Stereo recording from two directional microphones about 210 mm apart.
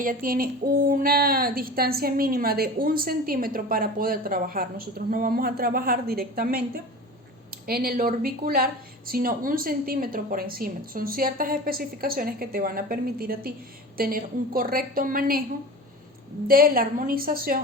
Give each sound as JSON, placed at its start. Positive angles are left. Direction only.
{"t": 0.0, "sound": "speech", "side_deg": -40}
{"t": 16.5, "sound": "speech", "side_deg": -45}